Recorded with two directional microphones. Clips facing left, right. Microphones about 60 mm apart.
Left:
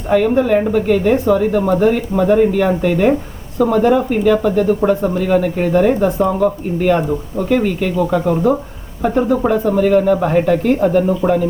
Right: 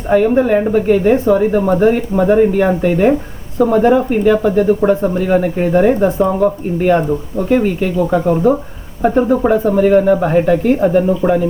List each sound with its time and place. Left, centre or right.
0.1 s speech: centre